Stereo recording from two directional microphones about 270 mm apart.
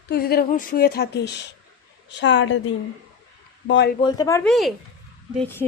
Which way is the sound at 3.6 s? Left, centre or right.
Left.